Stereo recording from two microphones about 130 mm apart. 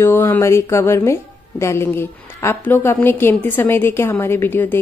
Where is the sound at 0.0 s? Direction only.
20° left (ahead or behind).